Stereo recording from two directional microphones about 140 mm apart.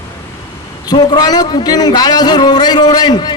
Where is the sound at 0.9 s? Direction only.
30° left (ahead or behind).